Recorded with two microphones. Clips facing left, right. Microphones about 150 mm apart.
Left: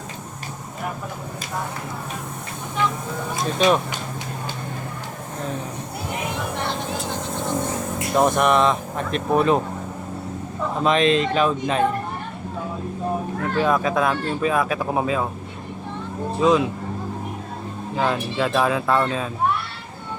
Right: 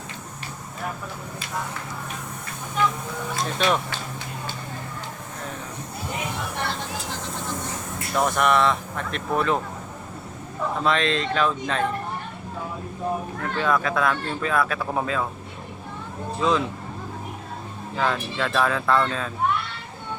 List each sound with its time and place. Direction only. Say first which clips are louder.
3.6 s speech: left 5 dB; 15° left (ahead or behind)
8.1 s speech: left 3 dB; 20° left (ahead or behind)
10.8 s speech: left 6 dB; 15° left (ahead or behind)
13.6 s speech: left 3 dB; 20° left (ahead or behind)
16.4 s speech: left 5 dB; 15° left (ahead or behind)
17.9 s speech: left 3 dB; 20° left (ahead or behind)